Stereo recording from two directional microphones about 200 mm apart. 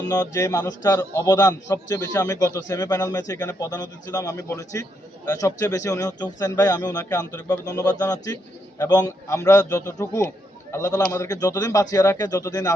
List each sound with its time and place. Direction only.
0.1 s a man's voice: 15° left (ahead or behind)